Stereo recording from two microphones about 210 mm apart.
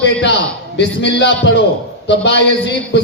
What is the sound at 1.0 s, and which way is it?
A man's voice, 55° left (ahead or behind).